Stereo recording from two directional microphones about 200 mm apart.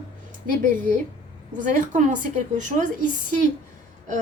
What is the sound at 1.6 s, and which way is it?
Speech, 40° right (ahead or behind).